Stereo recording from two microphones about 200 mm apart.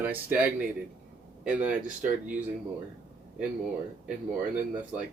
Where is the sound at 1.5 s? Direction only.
5° right (ahead or behind).